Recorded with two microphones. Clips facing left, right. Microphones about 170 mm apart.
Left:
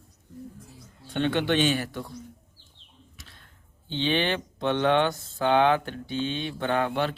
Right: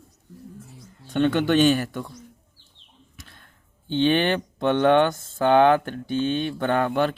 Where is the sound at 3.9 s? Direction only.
50° right (ahead or behind).